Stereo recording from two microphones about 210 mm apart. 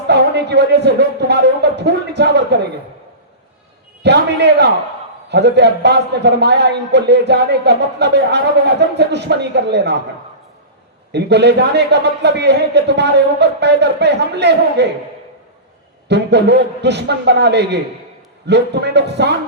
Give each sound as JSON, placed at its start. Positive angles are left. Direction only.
{"t": 0.1, "sound": "a man's voice", "side_deg": -55}
{"t": 4.0, "sound": "a man's voice", "side_deg": -55}
{"t": 11.1, "sound": "a man's voice", "side_deg": -55}
{"t": 16.0, "sound": "a man's voice", "side_deg": -55}